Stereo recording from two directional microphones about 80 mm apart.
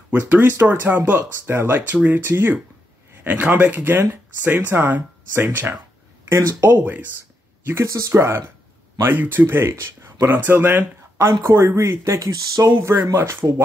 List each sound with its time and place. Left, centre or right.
0.1 s speech: right
7.6 s speech: right
12.7 s speech: right